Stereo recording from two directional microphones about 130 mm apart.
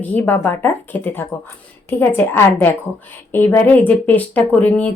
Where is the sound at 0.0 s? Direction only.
15° left (ahead or behind).